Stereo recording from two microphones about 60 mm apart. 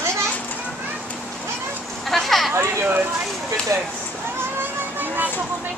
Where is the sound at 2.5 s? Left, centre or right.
Right.